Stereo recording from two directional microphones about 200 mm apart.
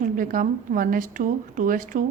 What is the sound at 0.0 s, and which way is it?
Speech, 45° right (ahead or behind).